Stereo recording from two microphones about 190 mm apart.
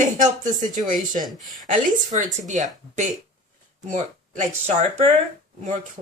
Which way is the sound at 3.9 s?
40° right (ahead or behind).